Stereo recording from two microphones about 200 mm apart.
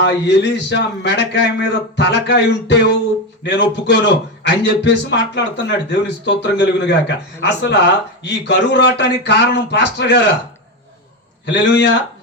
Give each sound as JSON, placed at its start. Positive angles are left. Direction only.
{"t": 0.0, "sound": "a man's voice", "side_deg": 60}
{"t": 11.4, "sound": "a man's voice", "side_deg": 60}